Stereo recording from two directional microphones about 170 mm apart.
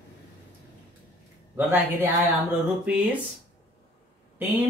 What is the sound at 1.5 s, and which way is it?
Speech, 10° right (ahead or behind).